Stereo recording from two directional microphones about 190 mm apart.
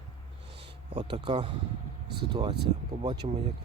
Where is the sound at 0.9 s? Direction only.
30° right (ahead or behind).